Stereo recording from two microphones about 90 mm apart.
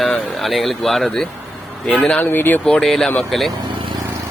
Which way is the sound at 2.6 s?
5° left (ahead or behind).